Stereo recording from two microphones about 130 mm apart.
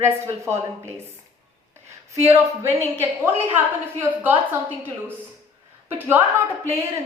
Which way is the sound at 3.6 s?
15° right (ahead or behind).